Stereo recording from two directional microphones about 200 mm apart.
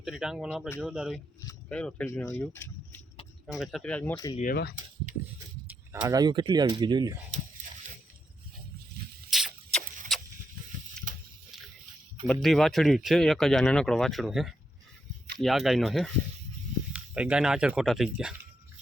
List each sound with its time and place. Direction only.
0.0 s speech: centre (ahead or behind)
3.4 s speech: centre (ahead or behind)
4.4 s speech: 50° left (ahead or behind)
5.6 s speech: 10° right (ahead or behind)
9.3 s vehicle: centre (ahead or behind)
10.1 s a sound: centre (ahead or behind)
11.1 s a sound: 40° right (ahead or behind)
12.3 s speech: centre (ahead or behind)